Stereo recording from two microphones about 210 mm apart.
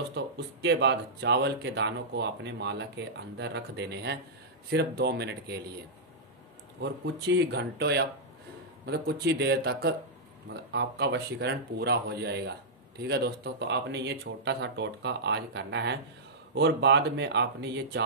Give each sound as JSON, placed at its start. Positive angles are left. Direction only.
{"t": 0.1, "sound": "speech", "side_deg": -55}
{"t": 6.8, "sound": "speech", "side_deg": -55}